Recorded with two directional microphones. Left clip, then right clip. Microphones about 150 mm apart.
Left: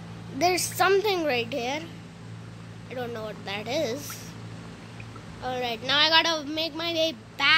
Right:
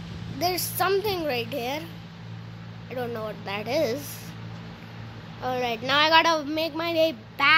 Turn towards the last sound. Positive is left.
turn(degrees=-5)  # may be behind; listen again after turning